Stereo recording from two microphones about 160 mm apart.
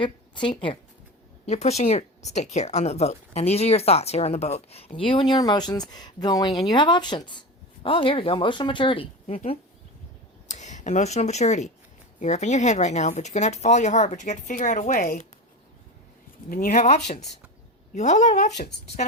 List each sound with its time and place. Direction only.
0.0 s speech: 30° left (ahead or behind)
1.5 s speech: 45° left (ahead or behind)
9.2 s speech: 40° left (ahead or behind); by 15.3 s 55° left (ahead or behind)
16.5 s speech: 60° left (ahead or behind)